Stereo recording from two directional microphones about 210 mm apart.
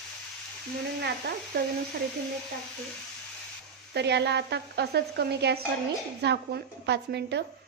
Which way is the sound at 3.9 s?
55° right (ahead or behind).